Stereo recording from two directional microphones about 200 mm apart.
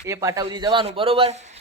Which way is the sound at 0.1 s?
15° right (ahead or behind).